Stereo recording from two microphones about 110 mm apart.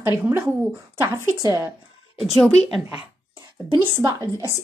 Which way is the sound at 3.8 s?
30° right (ahead or behind).